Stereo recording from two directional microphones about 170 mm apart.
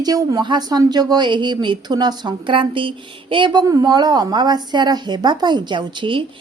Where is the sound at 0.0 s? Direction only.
20° right (ahead or behind).